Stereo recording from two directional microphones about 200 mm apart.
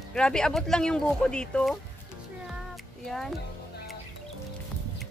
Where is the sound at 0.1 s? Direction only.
5° left (ahead or behind).